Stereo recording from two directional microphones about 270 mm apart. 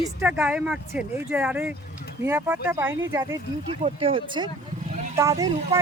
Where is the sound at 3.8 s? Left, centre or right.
Right.